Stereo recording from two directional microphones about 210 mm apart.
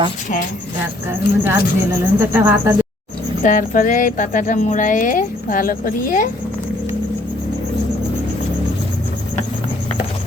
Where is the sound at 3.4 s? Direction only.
40° left (ahead or behind).